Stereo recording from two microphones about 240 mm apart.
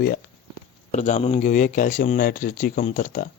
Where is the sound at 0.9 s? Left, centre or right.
Left.